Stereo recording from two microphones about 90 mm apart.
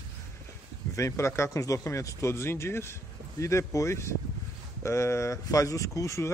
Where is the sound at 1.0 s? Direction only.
35° left (ahead or behind).